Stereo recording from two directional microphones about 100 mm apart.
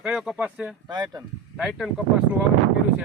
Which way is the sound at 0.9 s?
45° right (ahead or behind).